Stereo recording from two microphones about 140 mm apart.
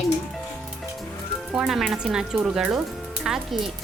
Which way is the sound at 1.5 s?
5° right (ahead or behind).